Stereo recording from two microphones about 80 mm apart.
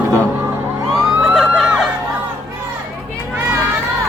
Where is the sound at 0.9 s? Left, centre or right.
Centre.